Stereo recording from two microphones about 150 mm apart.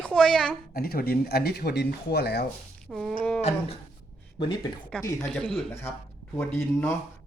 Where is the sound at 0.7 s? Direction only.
90° left.